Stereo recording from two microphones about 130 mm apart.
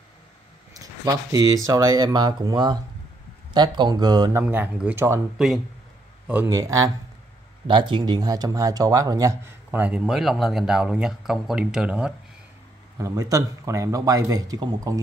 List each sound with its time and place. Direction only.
0.7 s speech: 25° right (ahead or behind)
4.3 s speech: 15° right (ahead or behind)
6.5 s speech: 25° right (ahead or behind)
7.6 s speech: 40° right (ahead or behind)
9.7 s speech: 10° right (ahead or behind)
12.9 s speech: 25° right (ahead or behind)